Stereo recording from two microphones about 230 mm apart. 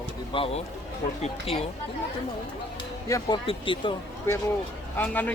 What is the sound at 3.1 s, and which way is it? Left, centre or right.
Speech, centre.